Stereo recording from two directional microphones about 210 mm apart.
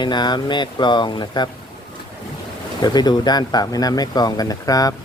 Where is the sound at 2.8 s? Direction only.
20° left (ahead or behind).